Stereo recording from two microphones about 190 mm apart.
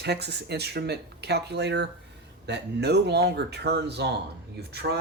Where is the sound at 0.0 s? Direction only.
60° right (ahead or behind).